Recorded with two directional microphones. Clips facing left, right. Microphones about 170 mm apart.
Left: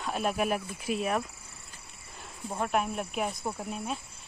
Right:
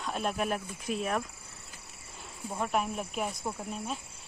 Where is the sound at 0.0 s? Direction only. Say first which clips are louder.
Left 2 dB; 5° left (ahead or behind).